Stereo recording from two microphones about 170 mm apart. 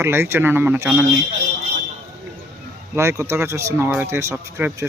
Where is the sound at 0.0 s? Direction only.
15° right (ahead or behind).